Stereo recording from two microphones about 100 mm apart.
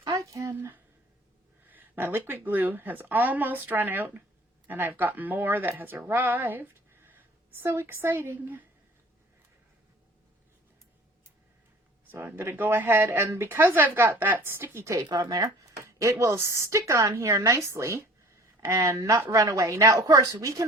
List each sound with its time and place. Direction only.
0.2 s a sound: 30° right (ahead or behind)
1.6 s speech: 20° right (ahead or behind)
12.1 s speech: 25° right (ahead or behind)